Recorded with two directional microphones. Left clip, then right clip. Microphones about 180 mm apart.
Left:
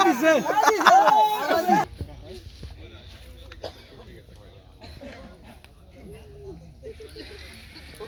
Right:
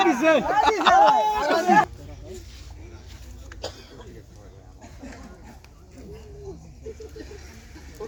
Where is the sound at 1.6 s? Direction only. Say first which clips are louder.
Right 6 dB; centre (ahead or behind).